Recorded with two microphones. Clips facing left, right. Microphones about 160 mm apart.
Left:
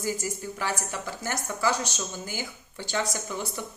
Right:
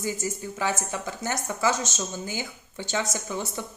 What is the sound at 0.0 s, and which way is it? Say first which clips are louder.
Speech: right 1 dB; 20° right (ahead or behind).